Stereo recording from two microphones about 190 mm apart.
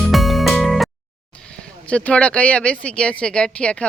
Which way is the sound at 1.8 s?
5° left (ahead or behind).